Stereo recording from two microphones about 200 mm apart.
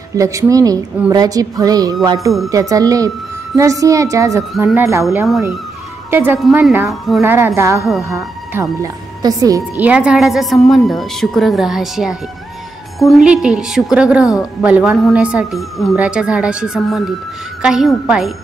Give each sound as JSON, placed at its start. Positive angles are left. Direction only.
{"t": 0.1, "sound": "a woman's voice", "side_deg": -15}
{"t": 5.0, "sound": "a woman's voice", "side_deg": 0}
{"t": 6.0, "sound": "a woman's voice", "side_deg": -10}
{"t": 7.2, "sound": "a woman's voice", "side_deg": -10}